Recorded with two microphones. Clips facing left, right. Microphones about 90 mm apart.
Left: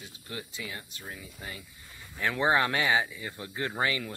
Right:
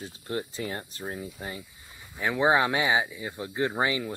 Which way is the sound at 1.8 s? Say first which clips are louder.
Right 1 dB; 15° right (ahead or behind).